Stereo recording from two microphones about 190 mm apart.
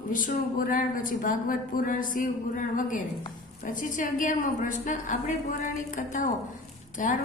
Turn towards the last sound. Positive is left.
turn(degrees=45)  # may be behind; listen again after turning